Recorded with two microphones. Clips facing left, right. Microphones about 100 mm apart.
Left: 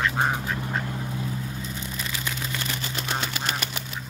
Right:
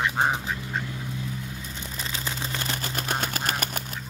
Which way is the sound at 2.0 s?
30° right (ahead or behind).